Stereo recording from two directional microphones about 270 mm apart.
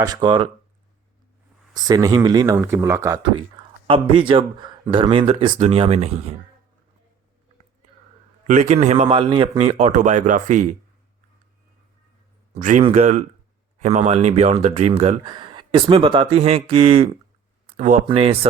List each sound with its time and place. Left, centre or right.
0.0 s speech: centre
1.7 s speech: centre
8.4 s speech: right
12.5 s speech: right